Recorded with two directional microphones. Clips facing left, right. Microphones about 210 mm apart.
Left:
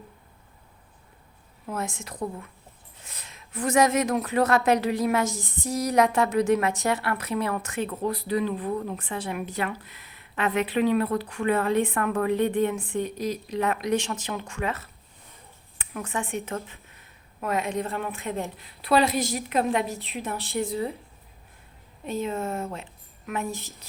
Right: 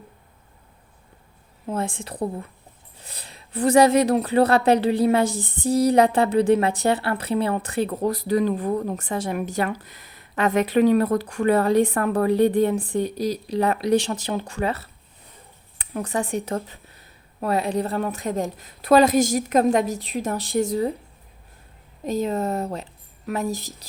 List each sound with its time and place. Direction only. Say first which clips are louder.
1.6 s a woman's voice: right 5 dB; 30° right (ahead or behind)
20.0 s a woman's voice: right 7 dB; centre (ahead or behind)
20.6 s speech: right 6 dB; 40° right (ahead or behind)
22.0 s a woman's voice: right 5 dB; 40° right (ahead or behind)